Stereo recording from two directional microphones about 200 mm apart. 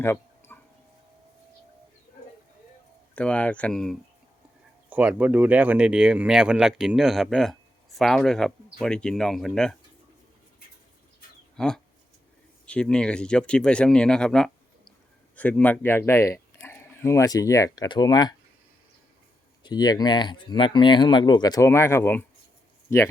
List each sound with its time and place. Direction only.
0.0 s a sound: 10° left (ahead or behind)
3.2 s speech: 5° left (ahead or behind)
4.9 s speech: 5° right (ahead or behind)
11.5 s speech: 5° left (ahead or behind); by 18.3 s 20° left (ahead or behind)
19.6 s speech: 20° left (ahead or behind)